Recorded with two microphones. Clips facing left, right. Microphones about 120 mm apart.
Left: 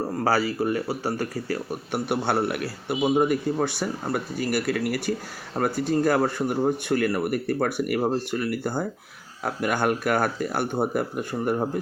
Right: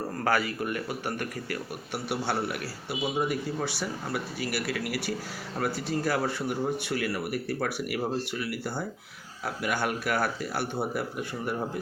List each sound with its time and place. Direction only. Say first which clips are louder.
0.3 s speech: left 4 dB; 30° left (ahead or behind)
1.9 s speech: left 6 dB; 55° left (ahead or behind)